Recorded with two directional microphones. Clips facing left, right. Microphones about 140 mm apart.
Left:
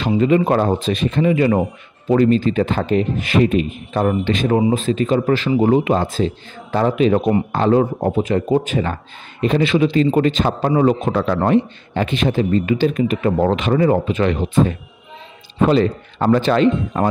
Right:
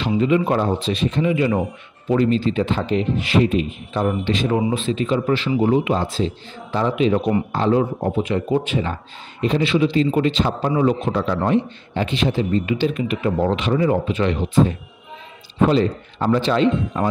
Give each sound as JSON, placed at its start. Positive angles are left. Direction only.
{"t": 0.0, "sound": "a man's voice", "side_deg": 50}
{"t": 9.4, "sound": "a man's voice", "side_deg": 55}
{"t": 15.7, "sound": "a man's voice", "side_deg": 60}